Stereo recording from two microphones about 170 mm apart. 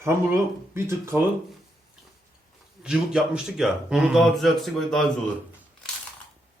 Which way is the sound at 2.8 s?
5° right (ahead or behind).